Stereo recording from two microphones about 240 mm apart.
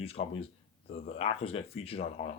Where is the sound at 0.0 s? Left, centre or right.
Left.